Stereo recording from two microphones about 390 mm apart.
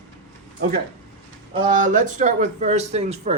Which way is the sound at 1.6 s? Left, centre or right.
Centre.